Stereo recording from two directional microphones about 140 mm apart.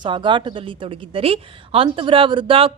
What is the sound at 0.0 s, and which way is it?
A woman's voice, 35° right (ahead or behind).